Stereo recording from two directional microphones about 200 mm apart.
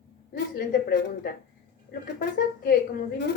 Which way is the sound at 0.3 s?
50° left (ahead or behind).